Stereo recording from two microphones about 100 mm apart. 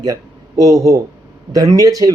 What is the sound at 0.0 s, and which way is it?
Speech, 35° right (ahead or behind).